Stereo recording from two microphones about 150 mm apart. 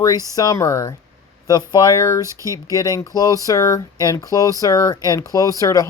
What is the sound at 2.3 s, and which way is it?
Speech, 20° right (ahead or behind).